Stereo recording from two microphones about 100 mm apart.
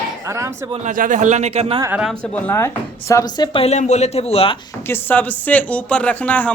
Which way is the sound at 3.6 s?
90° left.